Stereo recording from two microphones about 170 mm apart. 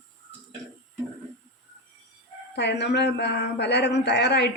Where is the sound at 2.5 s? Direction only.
85° left.